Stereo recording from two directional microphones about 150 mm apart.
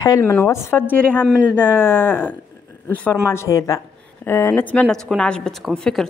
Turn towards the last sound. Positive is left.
turn(degrees=5)  # may be behind; listen again after turning